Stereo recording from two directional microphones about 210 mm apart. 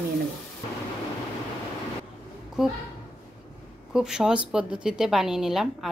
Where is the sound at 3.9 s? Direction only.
5° right (ahead or behind).